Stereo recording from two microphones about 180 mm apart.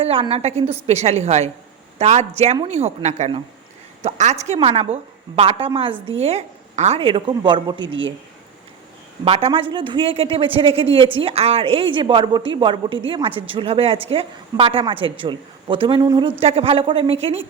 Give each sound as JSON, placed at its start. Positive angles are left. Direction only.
{"t": 0.0, "sound": "a woman's voice", "side_deg": -30}
{"t": 9.2, "sound": "a woman's voice", "side_deg": -30}
{"t": 16.4, "sound": "speech", "side_deg": -35}